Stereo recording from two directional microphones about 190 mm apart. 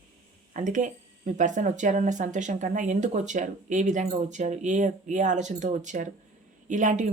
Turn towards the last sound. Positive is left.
turn(degrees=-40)  # may be behind; listen again after turning